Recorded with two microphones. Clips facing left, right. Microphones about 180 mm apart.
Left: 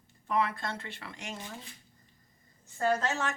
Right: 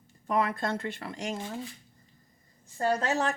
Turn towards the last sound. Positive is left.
turn(degrees=-35)  # may be behind; listen again after turning